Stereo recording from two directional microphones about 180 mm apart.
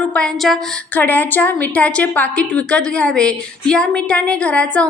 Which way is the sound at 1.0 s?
10° left (ahead or behind).